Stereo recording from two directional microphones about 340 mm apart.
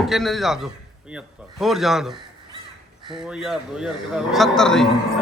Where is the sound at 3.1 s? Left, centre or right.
Centre.